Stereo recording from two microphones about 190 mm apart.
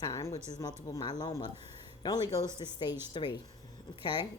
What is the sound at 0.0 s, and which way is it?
Speech, 15° left (ahead or behind).